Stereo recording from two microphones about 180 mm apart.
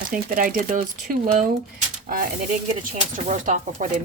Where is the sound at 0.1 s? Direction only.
50° right (ahead or behind).